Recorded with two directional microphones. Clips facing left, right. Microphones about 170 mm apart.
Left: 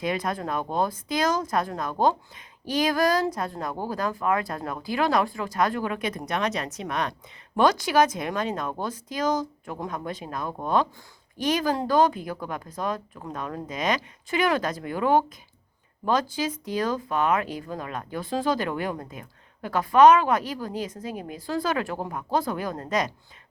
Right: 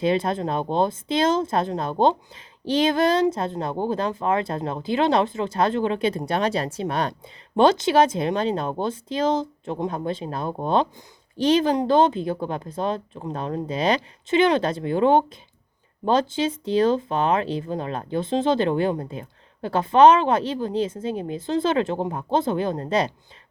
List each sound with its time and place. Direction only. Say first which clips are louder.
0.0 s speech: right 6 dB; 25° right (ahead or behind)